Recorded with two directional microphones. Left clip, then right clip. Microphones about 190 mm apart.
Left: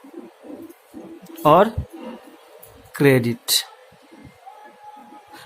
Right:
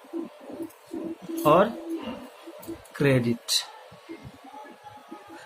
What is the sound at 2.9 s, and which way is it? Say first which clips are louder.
Speech: left 7 dB; 50° left (ahead or behind).